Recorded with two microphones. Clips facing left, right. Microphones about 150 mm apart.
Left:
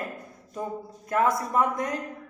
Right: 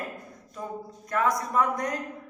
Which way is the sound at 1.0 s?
25° left (ahead or behind).